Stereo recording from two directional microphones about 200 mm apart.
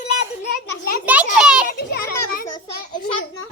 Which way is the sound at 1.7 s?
50° left (ahead or behind).